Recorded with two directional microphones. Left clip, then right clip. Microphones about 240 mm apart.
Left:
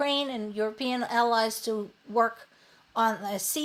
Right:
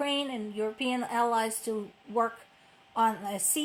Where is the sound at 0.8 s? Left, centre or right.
Left.